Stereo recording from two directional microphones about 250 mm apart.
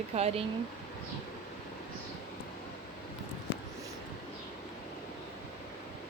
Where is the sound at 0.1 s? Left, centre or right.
Right.